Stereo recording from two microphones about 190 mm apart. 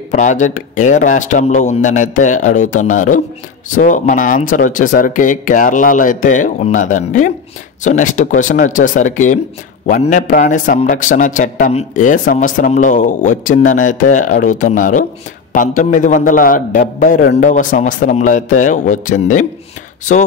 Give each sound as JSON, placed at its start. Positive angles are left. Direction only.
{"t": 0.1, "sound": "a man's voice", "side_deg": 40}